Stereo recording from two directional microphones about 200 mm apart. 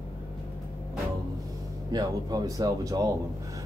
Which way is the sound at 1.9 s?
20° right (ahead or behind).